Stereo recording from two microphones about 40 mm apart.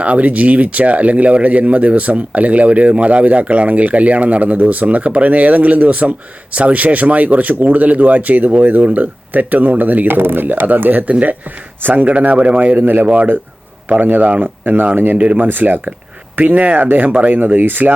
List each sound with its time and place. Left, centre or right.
0.0 s speech: right
10.2 s speech: right
11.1 s speech: right
11.8 s speech: right
12.1 s speech: right
12.5 s speech: right
16.4 s speech: right
17.3 s speech: right